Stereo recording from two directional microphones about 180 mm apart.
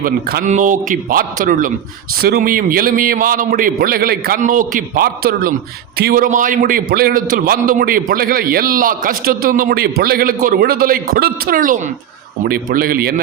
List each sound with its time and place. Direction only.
0.0 s speech: 60° right (ahead or behind)
0.4 s a man's voice: 45° right (ahead or behind)